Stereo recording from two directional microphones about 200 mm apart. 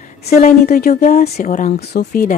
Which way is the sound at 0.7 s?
50° left (ahead or behind).